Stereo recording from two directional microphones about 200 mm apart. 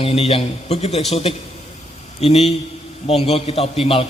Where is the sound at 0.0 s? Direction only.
30° left (ahead or behind).